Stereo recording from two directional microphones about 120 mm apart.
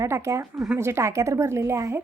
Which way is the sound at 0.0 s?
25° right (ahead or behind).